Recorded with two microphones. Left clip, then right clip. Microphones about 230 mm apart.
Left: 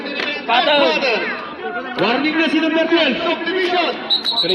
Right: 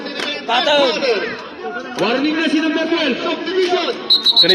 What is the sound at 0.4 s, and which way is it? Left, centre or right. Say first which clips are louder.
Speech: even; right.